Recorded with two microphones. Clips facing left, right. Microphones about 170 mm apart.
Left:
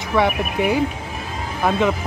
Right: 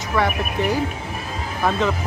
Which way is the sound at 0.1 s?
10° left (ahead or behind).